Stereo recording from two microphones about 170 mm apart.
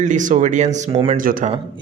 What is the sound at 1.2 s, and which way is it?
Speech, 55° right (ahead or behind).